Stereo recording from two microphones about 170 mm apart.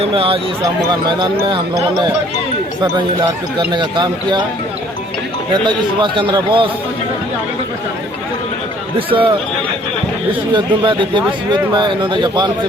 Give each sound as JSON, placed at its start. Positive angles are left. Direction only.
{"t": 0.0, "sound": "speech", "side_deg": -30}
{"t": 2.8, "sound": "a man's voice", "side_deg": -25}
{"t": 5.6, "sound": "a man's voice", "side_deg": -25}
{"t": 9.0, "sound": "speech", "side_deg": -30}
{"t": 10.5, "sound": "a man's voice", "side_deg": -30}